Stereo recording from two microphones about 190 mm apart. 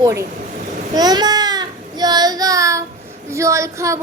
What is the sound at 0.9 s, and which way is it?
Child singing, 20° right (ahead or behind).